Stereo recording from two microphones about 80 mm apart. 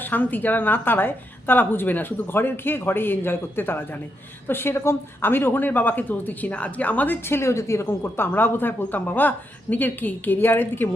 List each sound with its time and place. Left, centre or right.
0.0 s a woman's voice: left